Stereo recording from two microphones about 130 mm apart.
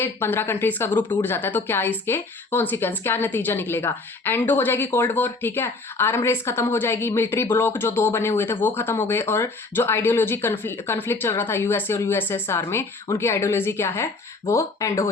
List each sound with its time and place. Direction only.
0.0 s a woman's voice: 15° left (ahead or behind)